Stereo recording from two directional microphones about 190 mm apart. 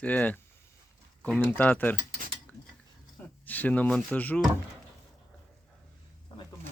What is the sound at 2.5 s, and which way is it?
Cutlery, 10° left (ahead or behind).